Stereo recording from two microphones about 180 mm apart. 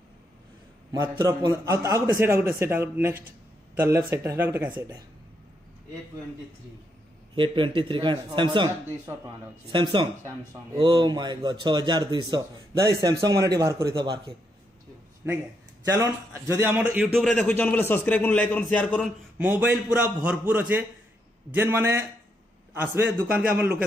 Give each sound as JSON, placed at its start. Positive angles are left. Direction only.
{"t": 1.1, "sound": "a man's voice", "side_deg": -20}
{"t": 7.3, "sound": "speech", "side_deg": -25}
{"t": 15.2, "sound": "a man's voice", "side_deg": -15}
{"t": 16.9, "sound": "a man's voice", "side_deg": 0}
{"t": 19.3, "sound": "a man's voice", "side_deg": -10}
{"t": 23.6, "sound": "a man's voice", "side_deg": -10}